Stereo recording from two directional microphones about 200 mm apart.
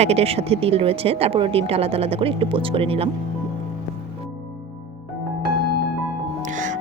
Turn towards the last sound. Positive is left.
turn(degrees=-40)  # may be behind; listen again after turning